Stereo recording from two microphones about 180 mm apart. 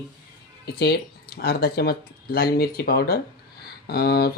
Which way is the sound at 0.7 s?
60° left (ahead or behind).